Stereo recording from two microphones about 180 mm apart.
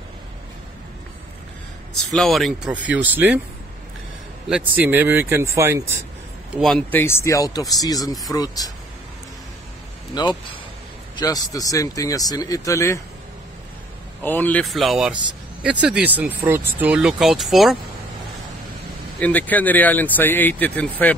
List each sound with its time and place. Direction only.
2.0 s speech: centre (ahead or behind)
4.5 s speech: 5° right (ahead or behind)
6.5 s speech: centre (ahead or behind); by 8.7 s 20° left (ahead or behind)
10.1 s speech: 25° left (ahead or behind)
14.2 s speech: 10° left (ahead or behind)
19.1 s speech: 10° left (ahead or behind)